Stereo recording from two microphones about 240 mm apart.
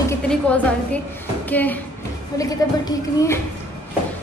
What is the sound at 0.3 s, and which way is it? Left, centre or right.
A woman's voice, centre.